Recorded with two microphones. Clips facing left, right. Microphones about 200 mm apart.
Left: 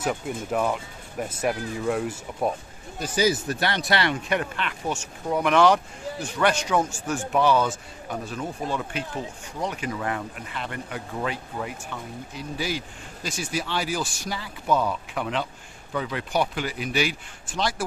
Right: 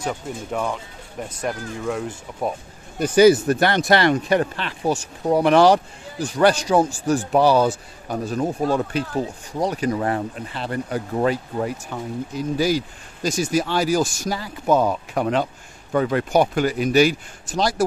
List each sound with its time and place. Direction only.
0.0 s speech: 5° left (ahead or behind)
3.0 s speech: 60° right (ahead or behind); by 17.8 s 40° right (ahead or behind)